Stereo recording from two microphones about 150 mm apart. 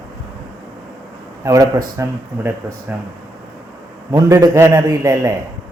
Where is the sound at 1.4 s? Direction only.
20° right (ahead or behind).